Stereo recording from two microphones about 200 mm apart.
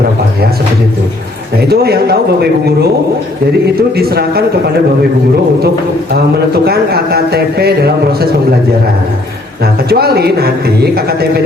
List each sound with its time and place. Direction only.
1.6 s speech: 50° right (ahead or behind)
3.9 s speech: 50° right (ahead or behind)
6.7 s speech: 50° right (ahead or behind)
9.9 s speech: 50° right (ahead or behind)